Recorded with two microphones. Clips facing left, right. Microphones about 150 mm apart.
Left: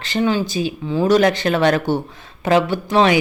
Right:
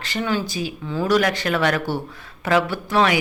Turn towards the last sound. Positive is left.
turn(degrees=25)  # may be behind; listen again after turning